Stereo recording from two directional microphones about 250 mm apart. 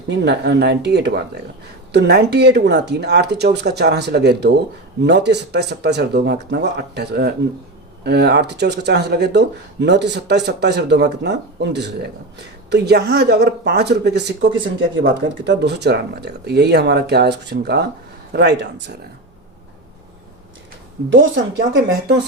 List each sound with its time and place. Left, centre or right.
0.3 s speech: right
21.1 s speech: right